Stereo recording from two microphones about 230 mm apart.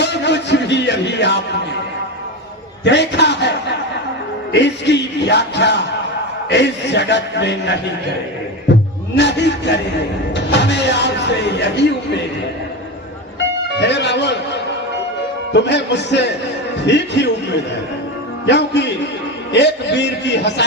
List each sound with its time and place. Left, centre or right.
0.0 s music: left
2.8 s speech: left
9.1 s speech: left
13.7 s a man's voice: left